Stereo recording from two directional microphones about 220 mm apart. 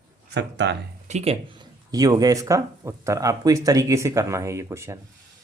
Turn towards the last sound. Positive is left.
turn(degrees=-15)  # may be behind; listen again after turning